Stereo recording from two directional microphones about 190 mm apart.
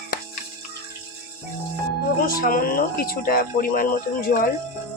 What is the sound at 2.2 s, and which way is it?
Speech, 50° left (ahead or behind).